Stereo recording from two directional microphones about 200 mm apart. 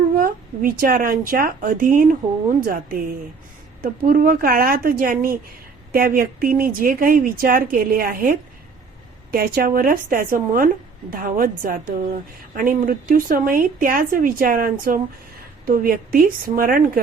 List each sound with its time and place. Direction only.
0.2 s a woman's voice: 45° right (ahead or behind)